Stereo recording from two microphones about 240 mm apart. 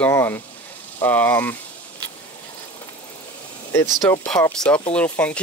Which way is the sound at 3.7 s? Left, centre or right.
Centre.